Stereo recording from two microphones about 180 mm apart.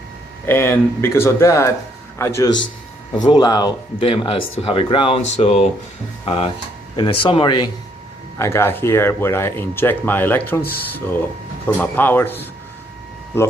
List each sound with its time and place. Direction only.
0.4 s speech: 15° left (ahead or behind)
8.4 s speech: 15° left (ahead or behind)
10.6 s speech: 60° left (ahead or behind)
10.9 s speech: 10° left (ahead or behind)